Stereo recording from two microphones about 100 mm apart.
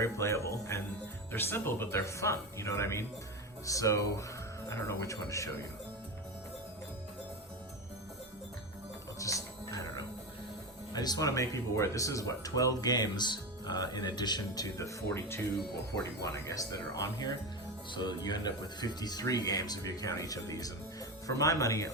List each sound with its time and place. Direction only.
0.0 s speech: 30° left (ahead or behind)
9.1 s music: 35° left (ahead or behind)
10.9 s speech: 40° left (ahead or behind)